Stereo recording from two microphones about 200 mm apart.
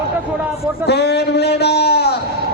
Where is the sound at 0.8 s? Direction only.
55° left (ahead or behind).